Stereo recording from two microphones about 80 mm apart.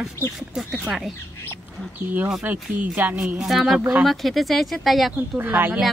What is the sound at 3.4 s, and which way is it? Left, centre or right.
Speech, centre.